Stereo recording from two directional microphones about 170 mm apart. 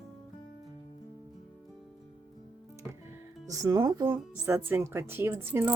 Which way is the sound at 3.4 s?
20° right (ahead or behind).